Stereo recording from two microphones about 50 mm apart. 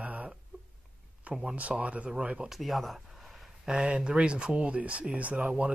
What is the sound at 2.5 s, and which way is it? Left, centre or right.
Speech, centre.